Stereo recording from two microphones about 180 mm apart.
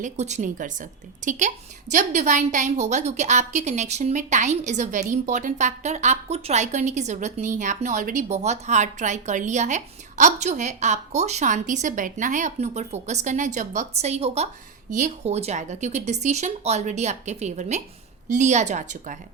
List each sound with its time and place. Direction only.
0.0 s a woman's voice: 40° right (ahead or behind)